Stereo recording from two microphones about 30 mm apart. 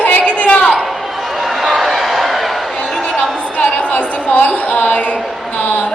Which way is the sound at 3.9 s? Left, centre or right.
Left.